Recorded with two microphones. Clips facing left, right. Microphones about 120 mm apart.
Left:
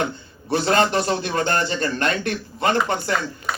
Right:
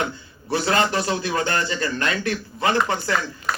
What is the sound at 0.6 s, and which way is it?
Speech, 45° left (ahead or behind).